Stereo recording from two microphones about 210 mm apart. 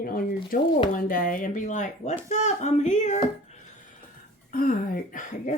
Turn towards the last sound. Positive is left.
turn(degrees=40)  # may be behind; listen again after turning